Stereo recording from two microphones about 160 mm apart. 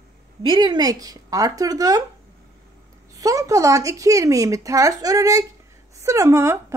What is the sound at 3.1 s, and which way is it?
Speech, 20° right (ahead or behind).